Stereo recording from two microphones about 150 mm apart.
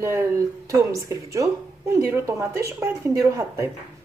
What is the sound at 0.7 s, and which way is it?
A woman's voice, 20° right (ahead or behind).